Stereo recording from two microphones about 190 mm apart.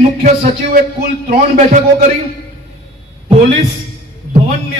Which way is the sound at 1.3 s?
40° right (ahead or behind).